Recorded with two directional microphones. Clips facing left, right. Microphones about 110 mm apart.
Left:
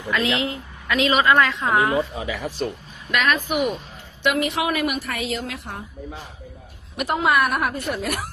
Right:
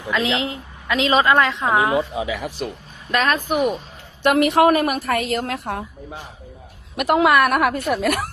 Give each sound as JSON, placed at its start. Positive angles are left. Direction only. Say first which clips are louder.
{"t": 0.1, "sound": "a woman's voice", "louder": "right 1 dB", "side_deg": -20}
{"t": 3.1, "sound": "speech", "louder": "right 2 dB", "side_deg": -35}
{"t": 4.4, "sound": "a woman's voice", "louder": "right 8 dB", "side_deg": -55}
{"t": 6.9, "sound": "a woman's voice", "louder": "right 5 dB", "side_deg": -55}